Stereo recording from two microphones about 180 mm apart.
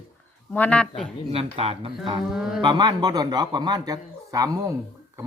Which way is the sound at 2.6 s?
25° right (ahead or behind).